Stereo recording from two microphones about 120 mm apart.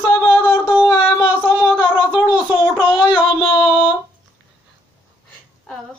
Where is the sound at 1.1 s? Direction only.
40° left (ahead or behind).